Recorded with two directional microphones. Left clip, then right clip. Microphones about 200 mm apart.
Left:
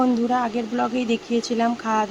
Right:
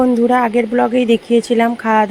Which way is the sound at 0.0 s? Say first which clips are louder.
Right 8 dB; 25° right (ahead or behind).